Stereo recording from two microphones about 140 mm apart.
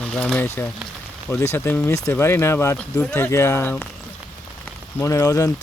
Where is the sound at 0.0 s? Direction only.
5° left (ahead or behind).